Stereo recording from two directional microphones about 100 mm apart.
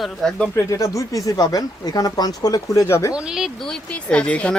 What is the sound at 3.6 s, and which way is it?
Speech, 10° left (ahead or behind).